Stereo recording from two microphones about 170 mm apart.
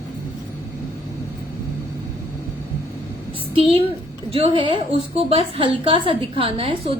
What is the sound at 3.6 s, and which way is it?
A woman's voice, 35° right (ahead or behind).